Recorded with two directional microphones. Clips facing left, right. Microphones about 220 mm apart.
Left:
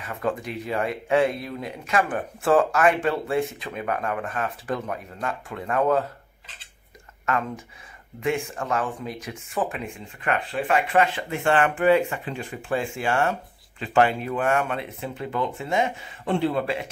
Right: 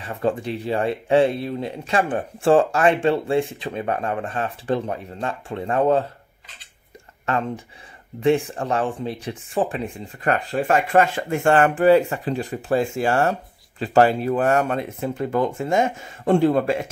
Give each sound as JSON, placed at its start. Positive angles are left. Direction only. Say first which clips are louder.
{"t": 0.0, "sound": "speech", "louder": "right 4 dB", "side_deg": -30}
{"t": 7.2, "sound": "speech", "louder": "right 3 dB", "side_deg": -30}